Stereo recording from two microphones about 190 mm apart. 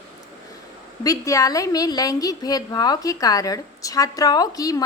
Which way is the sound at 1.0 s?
15° left (ahead or behind).